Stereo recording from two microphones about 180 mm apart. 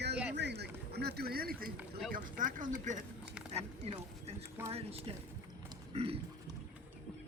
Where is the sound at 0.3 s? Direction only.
65° right (ahead or behind).